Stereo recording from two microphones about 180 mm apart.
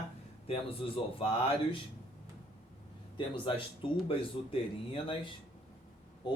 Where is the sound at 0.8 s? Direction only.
30° left (ahead or behind).